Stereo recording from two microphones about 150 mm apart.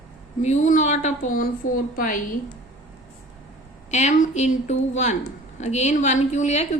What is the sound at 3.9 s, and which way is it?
A woman's voice, 50° left (ahead or behind).